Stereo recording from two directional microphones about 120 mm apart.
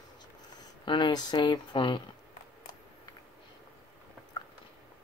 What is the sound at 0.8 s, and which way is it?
Speech, 40° left (ahead or behind).